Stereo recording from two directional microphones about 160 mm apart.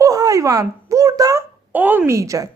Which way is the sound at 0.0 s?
20° right (ahead or behind).